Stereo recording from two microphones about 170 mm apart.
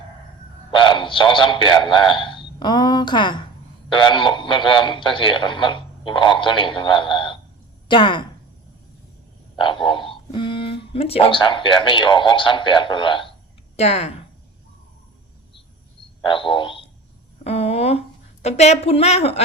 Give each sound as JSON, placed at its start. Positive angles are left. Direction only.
{"t": 0.7, "sound": "a sound", "side_deg": 30}
{"t": 4.1, "sound": "a man's voice", "side_deg": 30}
{"t": 9.8, "sound": "a woman's voice", "side_deg": 30}
{"t": 16.2, "sound": "a man's voice", "side_deg": 30}